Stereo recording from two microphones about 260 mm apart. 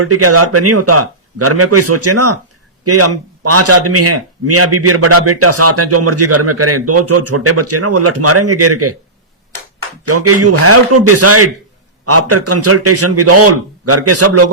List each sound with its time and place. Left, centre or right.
0.0 s a man's voice: right
10.1 s a man's voice: right